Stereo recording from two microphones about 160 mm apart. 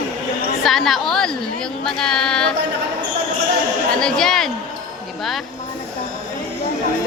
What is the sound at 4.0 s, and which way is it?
Speech, 5° left (ahead or behind).